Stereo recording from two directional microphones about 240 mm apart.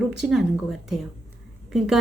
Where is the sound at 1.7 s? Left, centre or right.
Centre.